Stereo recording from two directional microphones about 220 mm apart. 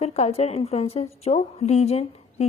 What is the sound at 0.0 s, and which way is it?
A woman's voice, 30° left (ahead or behind).